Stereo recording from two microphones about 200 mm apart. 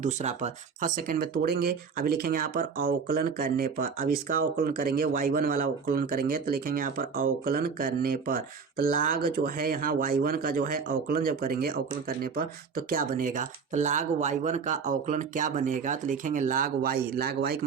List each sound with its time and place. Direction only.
0.0 s speech: 35° right (ahead or behind); by 17.6 s 50° right (ahead or behind)